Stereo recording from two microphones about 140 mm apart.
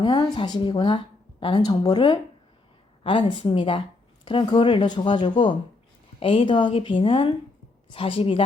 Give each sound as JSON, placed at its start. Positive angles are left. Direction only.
{"t": 0.0, "sound": "a woman's voice", "side_deg": 30}